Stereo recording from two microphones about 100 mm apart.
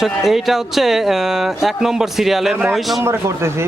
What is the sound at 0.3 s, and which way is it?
Speech, centre (ahead or behind).